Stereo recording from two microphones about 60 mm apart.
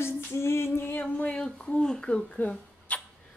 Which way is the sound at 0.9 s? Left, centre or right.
Left.